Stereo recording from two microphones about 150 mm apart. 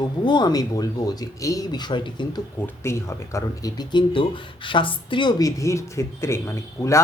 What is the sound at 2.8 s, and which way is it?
A man's voice, 20° left (ahead or behind).